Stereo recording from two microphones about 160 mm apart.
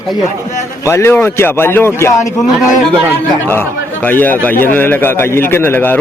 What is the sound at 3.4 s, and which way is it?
A man's voice, 10° left (ahead or behind).